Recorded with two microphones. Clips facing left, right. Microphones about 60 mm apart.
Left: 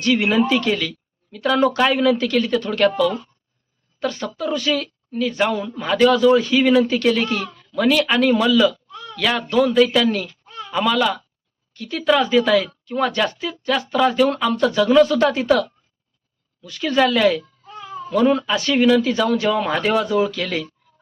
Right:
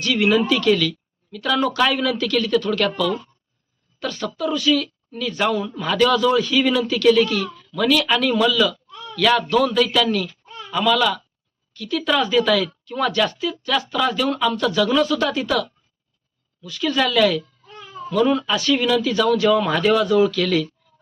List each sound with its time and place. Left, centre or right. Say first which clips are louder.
0.0 s speech: left 1 dB; left